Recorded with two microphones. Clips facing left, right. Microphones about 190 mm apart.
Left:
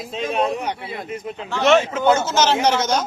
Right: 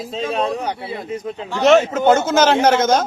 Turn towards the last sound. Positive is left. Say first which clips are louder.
# right 4 dB
turn(degrees=-50)  # may be behind; listen again after turning